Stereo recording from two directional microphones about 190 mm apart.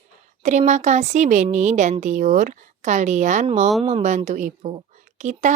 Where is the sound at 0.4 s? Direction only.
40° right (ahead or behind).